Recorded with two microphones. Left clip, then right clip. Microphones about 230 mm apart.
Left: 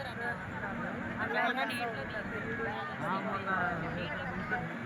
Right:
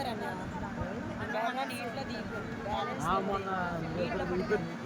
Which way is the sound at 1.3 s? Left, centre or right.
Right.